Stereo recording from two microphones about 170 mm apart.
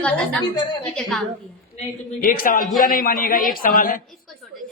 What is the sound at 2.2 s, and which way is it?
A man's voice, 55° left (ahead or behind).